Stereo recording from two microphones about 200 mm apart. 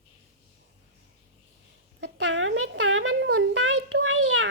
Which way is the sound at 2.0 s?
65° right (ahead or behind).